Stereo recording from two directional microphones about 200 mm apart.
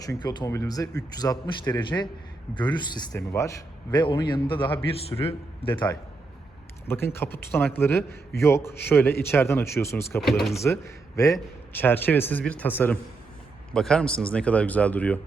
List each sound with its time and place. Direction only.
0.0 s a man's voice: 20° left (ahead or behind)
3.1 s a man's voice: 10° left (ahead or behind)
3.9 s a man's voice: 25° left (ahead or behind)
6.8 s a man's voice: 10° left (ahead or behind)
10.2 s speech: centre (ahead or behind)
10.5 s a man's voice: 15° left (ahead or behind)